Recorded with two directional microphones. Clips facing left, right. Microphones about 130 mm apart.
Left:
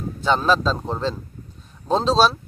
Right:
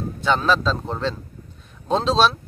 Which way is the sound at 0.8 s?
5° left (ahead or behind).